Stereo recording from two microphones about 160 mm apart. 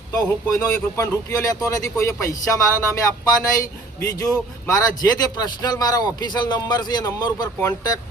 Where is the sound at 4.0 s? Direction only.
20° left (ahead or behind).